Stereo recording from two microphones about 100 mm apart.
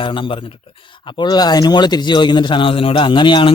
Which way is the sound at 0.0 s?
55° left (ahead or behind).